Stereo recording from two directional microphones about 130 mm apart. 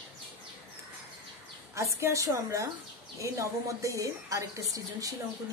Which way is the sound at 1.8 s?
20° right (ahead or behind).